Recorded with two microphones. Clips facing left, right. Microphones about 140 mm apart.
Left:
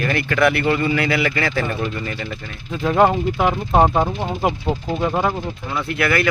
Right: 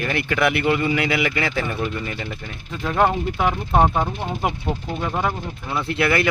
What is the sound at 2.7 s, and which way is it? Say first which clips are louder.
Speech: left 4 dB; 5° left (ahead or behind).